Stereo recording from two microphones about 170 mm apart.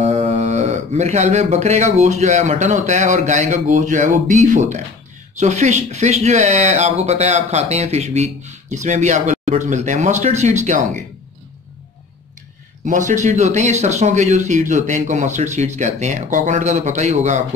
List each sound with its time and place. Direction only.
0.0 s speech: 45° right (ahead or behind)
12.8 s speech: 45° right (ahead or behind)